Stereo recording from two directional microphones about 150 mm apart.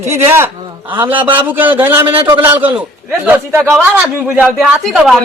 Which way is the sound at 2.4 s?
10° right (ahead or behind).